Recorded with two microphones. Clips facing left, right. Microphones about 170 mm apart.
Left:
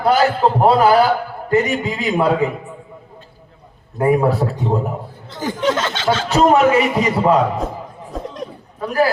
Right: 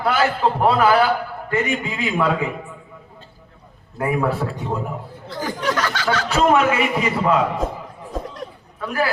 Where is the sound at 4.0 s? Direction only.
35° left (ahead or behind).